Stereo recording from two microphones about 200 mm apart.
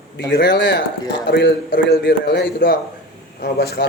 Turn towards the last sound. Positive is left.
turn(degrees=55)  # may be behind; listen again after turning